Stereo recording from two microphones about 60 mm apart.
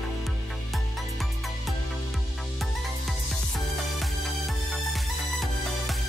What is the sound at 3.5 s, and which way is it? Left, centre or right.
Music, centre.